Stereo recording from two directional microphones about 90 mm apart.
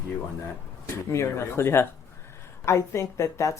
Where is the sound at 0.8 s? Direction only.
30° left (ahead or behind).